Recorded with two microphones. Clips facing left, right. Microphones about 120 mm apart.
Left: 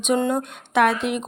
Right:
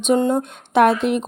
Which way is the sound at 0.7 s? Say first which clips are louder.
Right 4 dB; 35° right (ahead or behind).